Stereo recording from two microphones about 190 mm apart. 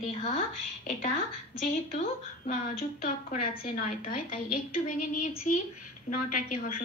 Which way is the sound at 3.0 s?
45° left (ahead or behind).